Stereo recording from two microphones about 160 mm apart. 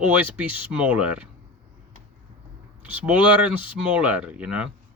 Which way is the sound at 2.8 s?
10° right (ahead or behind).